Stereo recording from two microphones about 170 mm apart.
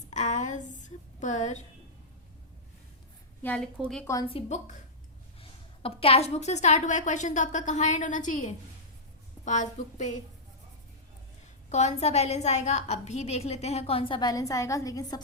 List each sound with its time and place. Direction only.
0.1 s a woman's voice: 45° left (ahead or behind)
3.4 s a woman's voice: 10° left (ahead or behind)
4.0 s a woman's voice: 20° left (ahead or behind)
4.3 s a woman's voice: 40° left (ahead or behind)
11.7 s a woman's voice: 40° left (ahead or behind); by 15.2 s 20° left (ahead or behind)